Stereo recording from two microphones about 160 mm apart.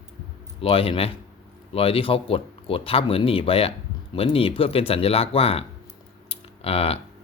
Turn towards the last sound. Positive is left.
turn(degrees=40)  # may be behind; listen again after turning